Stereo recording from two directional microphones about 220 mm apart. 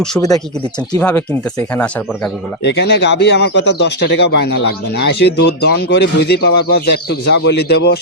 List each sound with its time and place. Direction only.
0.9 s speech: 10° left (ahead or behind)
2.6 s speech: 50° left (ahead or behind)